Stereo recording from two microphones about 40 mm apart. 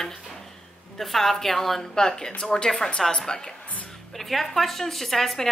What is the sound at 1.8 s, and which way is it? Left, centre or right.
A woman's voice, centre.